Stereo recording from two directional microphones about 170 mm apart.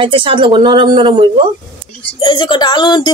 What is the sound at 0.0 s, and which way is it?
Speech, 30° right (ahead or behind).